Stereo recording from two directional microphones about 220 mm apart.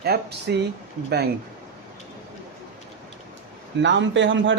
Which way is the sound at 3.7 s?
55° right (ahead or behind).